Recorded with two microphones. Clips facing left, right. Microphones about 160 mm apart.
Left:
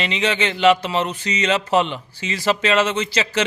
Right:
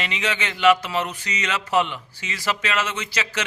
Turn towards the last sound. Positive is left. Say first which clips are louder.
# left 7 dB
turn(degrees=25)  # may be behind; listen again after turning